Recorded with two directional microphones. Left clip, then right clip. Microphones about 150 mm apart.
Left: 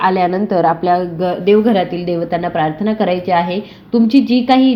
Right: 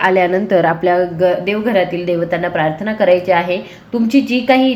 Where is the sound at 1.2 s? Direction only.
60° left (ahead or behind).